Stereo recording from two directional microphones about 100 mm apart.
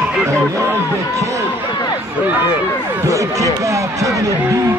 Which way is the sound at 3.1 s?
30° right (ahead or behind).